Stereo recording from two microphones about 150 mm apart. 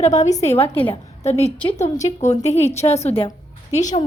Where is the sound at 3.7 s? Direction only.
55° left (ahead or behind).